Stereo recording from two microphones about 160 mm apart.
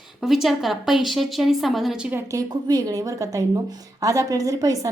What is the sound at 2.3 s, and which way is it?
A woman's voice, 25° right (ahead or behind).